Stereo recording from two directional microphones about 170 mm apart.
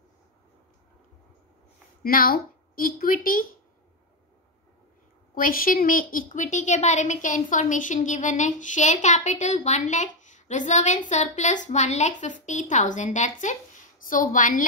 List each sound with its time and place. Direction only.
2.0 s a woman's voice: 60° left (ahead or behind)
5.3 s a woman's voice: 55° left (ahead or behind)